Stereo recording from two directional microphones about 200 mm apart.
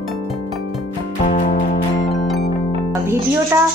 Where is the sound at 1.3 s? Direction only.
40° left (ahead or behind).